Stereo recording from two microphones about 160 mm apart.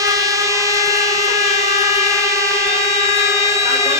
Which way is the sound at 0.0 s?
20° right (ahead or behind).